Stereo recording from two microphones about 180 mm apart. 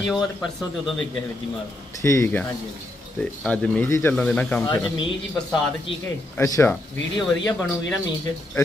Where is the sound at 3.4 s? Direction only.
5° left (ahead or behind).